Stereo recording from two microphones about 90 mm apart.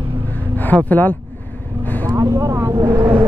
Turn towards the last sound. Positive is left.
turn(degrees=-30)  # may be behind; listen again after turning